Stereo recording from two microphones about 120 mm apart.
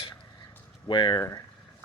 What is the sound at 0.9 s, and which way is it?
Speech, 40° left (ahead or behind).